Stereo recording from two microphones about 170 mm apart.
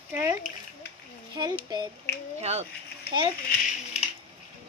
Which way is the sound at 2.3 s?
40° right (ahead or behind).